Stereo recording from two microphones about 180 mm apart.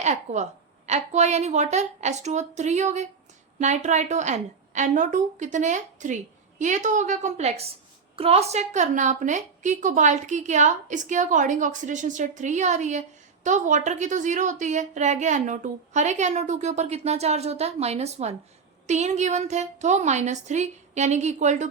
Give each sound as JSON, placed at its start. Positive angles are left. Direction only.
{"t": 0.0, "sound": "a woman's voice", "side_deg": -40}